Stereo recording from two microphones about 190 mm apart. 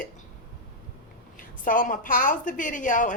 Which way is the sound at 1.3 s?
45° left (ahead or behind).